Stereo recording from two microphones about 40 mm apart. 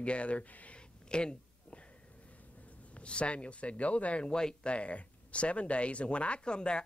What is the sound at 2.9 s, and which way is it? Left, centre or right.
Speech, left.